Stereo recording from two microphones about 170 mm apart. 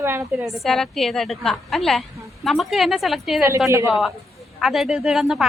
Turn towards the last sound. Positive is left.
turn(degrees=0)  # may be behind; listen again after turning